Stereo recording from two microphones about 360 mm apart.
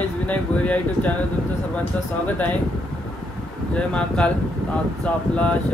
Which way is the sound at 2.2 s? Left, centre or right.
Centre.